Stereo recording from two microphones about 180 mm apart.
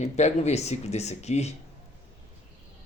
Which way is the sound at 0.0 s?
40° left (ahead or behind).